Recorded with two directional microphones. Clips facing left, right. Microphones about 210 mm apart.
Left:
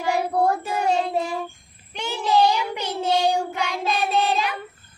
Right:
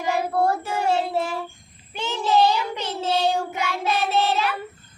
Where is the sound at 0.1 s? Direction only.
15° left (ahead or behind).